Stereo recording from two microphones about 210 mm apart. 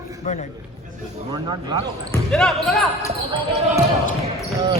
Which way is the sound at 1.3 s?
20° right (ahead or behind).